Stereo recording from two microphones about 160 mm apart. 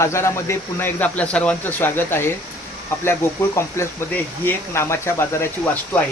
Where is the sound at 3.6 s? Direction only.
15° left (ahead or behind).